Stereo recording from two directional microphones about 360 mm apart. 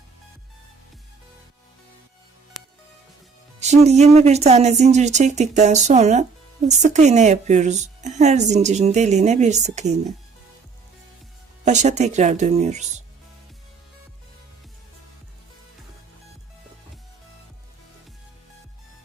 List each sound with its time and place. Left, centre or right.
3.6 s speech: centre
11.6 s speech: centre